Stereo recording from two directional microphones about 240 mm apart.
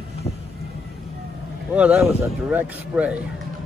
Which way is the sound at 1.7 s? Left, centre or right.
Centre.